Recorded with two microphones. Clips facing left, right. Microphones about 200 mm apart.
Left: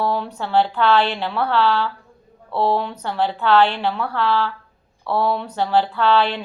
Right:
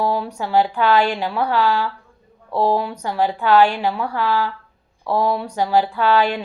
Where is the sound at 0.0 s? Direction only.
10° right (ahead or behind).